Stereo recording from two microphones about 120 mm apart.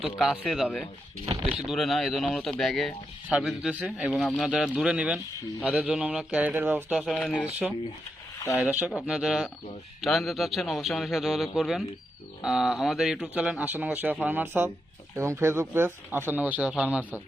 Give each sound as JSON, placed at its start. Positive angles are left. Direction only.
{"t": 0.0, "sound": "a man's voice", "side_deg": 0}
{"t": 1.2, "sound": "speech", "side_deg": -55}
{"t": 1.6, "sound": "a man's voice", "side_deg": 0}
{"t": 4.1, "sound": "speech", "side_deg": 10}
{"t": 4.4, "sound": "a man's voice", "side_deg": -5}
{"t": 7.0, "sound": "a man's voice", "side_deg": 5}
{"t": 8.6, "sound": "a man's voice", "side_deg": -10}